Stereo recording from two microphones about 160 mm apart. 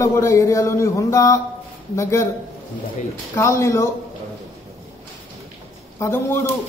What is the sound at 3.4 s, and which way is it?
Speech, 15° left (ahead or behind).